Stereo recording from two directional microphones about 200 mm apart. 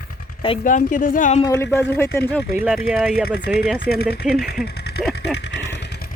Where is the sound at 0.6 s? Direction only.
40° left (ahead or behind).